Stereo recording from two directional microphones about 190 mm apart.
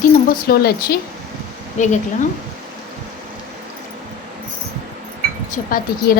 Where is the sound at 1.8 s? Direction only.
40° left (ahead or behind).